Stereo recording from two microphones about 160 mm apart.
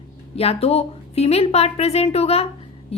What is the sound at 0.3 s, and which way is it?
A woman's voice, 40° left (ahead or behind).